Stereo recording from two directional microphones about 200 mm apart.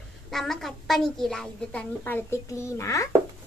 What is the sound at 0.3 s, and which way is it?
A woman's voice, centre (ahead or behind).